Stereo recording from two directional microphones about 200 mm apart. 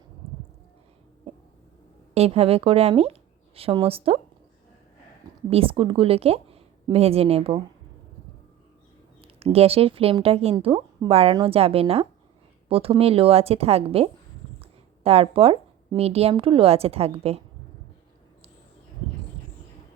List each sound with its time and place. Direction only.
2.1 s speech: 30° right (ahead or behind)
5.5 s a woman's voice: 30° right (ahead or behind)
9.2 s a woman's voice: 30° right (ahead or behind)